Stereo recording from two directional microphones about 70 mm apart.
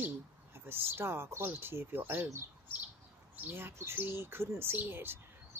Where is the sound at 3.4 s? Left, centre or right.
Right.